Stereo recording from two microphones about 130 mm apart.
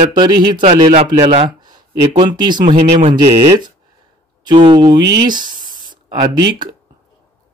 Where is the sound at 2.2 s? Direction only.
35° right (ahead or behind).